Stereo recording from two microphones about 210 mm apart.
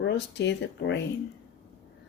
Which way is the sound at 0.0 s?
55° left (ahead or behind).